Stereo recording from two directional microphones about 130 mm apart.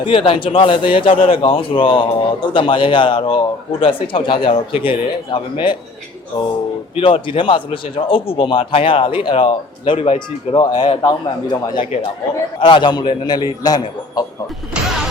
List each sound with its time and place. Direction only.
0.0 s a man's voice: 40° left (ahead or behind)
6.9 s a man's voice: 45° left (ahead or behind)
14.7 s speech: centre (ahead or behind)